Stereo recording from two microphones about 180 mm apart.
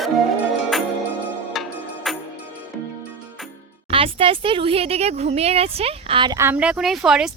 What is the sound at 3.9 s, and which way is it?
Speech, 30° right (ahead or behind).